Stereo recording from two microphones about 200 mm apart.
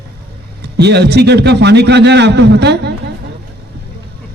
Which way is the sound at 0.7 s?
55° right (ahead or behind).